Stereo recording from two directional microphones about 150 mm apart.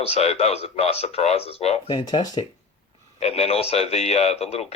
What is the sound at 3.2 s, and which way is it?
Speech, 40° left (ahead or behind).